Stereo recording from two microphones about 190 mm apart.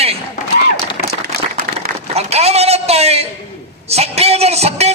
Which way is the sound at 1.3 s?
55° right (ahead or behind).